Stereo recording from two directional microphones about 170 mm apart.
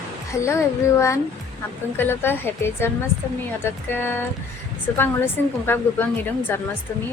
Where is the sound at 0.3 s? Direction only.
15° left (ahead or behind).